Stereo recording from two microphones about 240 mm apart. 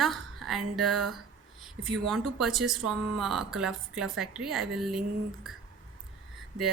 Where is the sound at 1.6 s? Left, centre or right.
Centre.